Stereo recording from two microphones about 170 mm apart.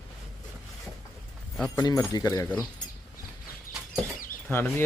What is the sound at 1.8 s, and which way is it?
Speech, 20° left (ahead or behind).